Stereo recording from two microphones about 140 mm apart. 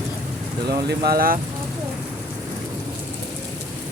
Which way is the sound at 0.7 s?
90° right.